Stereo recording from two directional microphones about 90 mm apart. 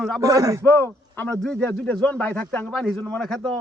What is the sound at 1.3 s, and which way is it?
A man's voice, 10° left (ahead or behind).